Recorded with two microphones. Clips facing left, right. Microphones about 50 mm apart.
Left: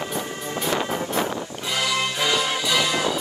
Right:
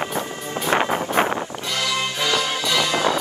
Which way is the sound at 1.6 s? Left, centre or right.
Centre.